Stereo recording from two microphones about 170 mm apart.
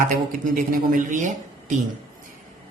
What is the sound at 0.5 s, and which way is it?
A woman's voice, 50° right (ahead or behind).